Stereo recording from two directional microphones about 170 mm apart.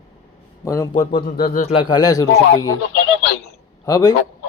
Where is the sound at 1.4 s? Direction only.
65° left (ahead or behind).